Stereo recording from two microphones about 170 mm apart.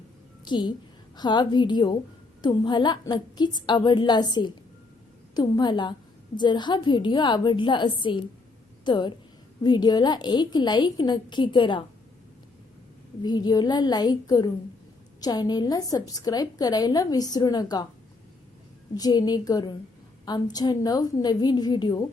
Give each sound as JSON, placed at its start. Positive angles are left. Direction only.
{"t": 0.4, "sound": "a woman's voice", "side_deg": 25}
{"t": 13.2, "sound": "a woman's voice", "side_deg": 25}
{"t": 18.9, "sound": "a woman's voice", "side_deg": 25}